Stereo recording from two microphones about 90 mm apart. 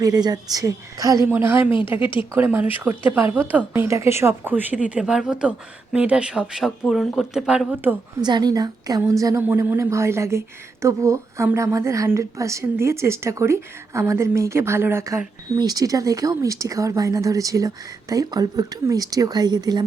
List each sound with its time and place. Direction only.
0.0 s speech: 45° right (ahead or behind)
1.3 s speech: 25° right (ahead or behind)
8.2 s a woman's voice: 50° right (ahead or behind)
9.4 s a woman's voice: 25° right (ahead or behind)
15.5 s a woman's voice: 45° right (ahead or behind)